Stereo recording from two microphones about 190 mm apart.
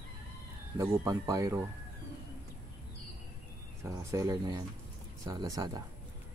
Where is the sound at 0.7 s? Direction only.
15° right (ahead or behind).